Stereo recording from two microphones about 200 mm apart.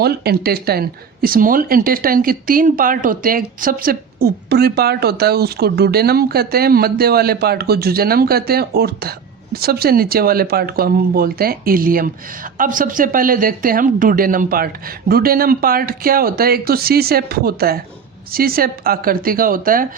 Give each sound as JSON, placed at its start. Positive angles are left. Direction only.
{"t": 0.0, "sound": "speech", "side_deg": -50}